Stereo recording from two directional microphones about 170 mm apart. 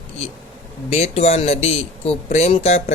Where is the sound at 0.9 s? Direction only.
40° left (ahead or behind).